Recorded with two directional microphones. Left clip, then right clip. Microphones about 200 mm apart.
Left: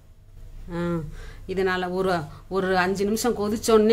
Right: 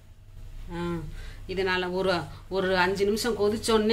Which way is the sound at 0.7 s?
50° left (ahead or behind).